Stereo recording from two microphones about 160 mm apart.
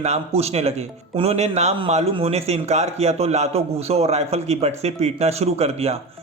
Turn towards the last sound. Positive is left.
turn(degrees=-40)  # may be behind; listen again after turning